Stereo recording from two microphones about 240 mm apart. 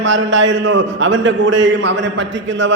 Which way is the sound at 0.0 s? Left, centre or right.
Right.